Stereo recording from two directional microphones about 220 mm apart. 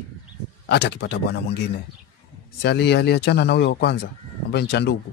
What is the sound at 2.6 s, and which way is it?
Speech, 50° left (ahead or behind).